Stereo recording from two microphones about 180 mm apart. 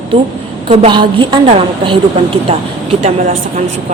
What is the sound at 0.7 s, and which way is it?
A woman's voice, 30° right (ahead or behind).